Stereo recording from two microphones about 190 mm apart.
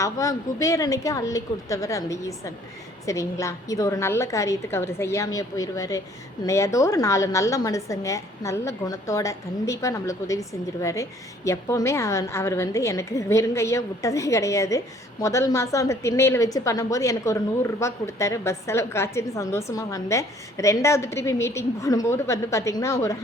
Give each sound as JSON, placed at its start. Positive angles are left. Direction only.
{"t": 0.0, "sound": "a woman's voice", "side_deg": 15}